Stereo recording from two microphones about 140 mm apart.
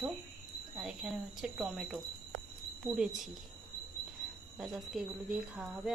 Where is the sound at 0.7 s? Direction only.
5° right (ahead or behind).